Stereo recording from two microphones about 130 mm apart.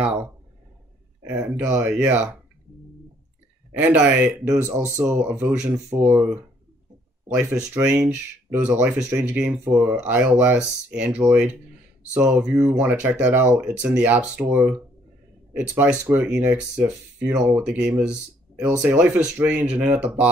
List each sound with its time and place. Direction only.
0.0 s a sound: 10° right (ahead or behind)
1.3 s speech: 15° right (ahead or behind)
3.7 s speech: 10° right (ahead or behind)
4.6 s speech: 20° right (ahead or behind)